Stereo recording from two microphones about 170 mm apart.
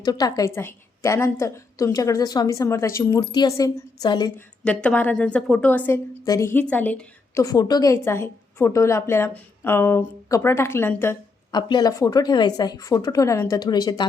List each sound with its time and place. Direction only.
0.0 s a woman's voice: 20° left (ahead or behind)
4.6 s a woman's voice: 5° left (ahead or behind)
7.4 s a woman's voice: 25° left (ahead or behind)
11.5 s a woman's voice: 25° left (ahead or behind)